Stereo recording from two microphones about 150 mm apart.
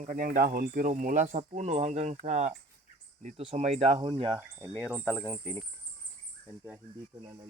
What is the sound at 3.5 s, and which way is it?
Speech, 45° right (ahead or behind).